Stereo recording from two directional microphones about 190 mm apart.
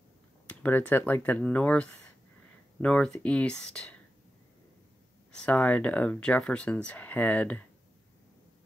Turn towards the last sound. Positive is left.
turn(degrees=10)  # may be behind; listen again after turning